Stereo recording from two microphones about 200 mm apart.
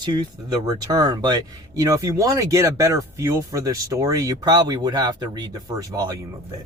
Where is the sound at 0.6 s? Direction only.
20° right (ahead or behind).